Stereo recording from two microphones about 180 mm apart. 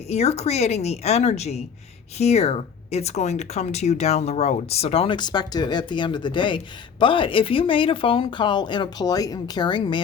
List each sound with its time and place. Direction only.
0.1 s speech: 35° left (ahead or behind)